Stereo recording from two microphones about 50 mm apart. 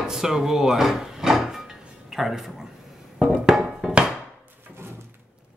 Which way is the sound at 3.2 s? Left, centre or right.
Centre.